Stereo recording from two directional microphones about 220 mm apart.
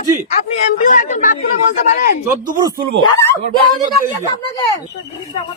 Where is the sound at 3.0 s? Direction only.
20° left (ahead or behind).